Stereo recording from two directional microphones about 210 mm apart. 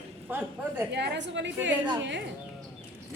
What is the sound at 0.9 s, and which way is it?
A woman's voice, 55° right (ahead or behind).